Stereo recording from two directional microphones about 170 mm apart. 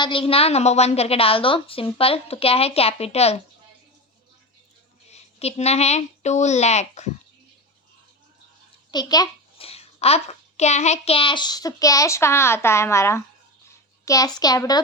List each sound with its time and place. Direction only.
0.0 s a woman's voice: 30° left (ahead or behind)
5.1 s a woman's voice: 40° left (ahead or behind)
8.9 s a child's voice: 25° left (ahead or behind)
9.6 s a child's voice: 35° left (ahead or behind)